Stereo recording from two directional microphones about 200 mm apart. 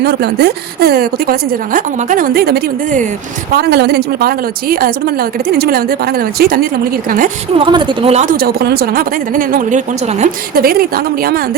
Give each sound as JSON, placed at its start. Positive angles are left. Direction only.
{"t": 0.0, "sound": "speech", "side_deg": -55}
{"t": 7.5, "sound": "a woman's voice", "side_deg": -25}
{"t": 8.4, "sound": "speech", "side_deg": -50}